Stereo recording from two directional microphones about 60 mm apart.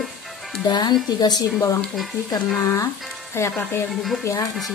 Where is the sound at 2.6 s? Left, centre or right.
Left.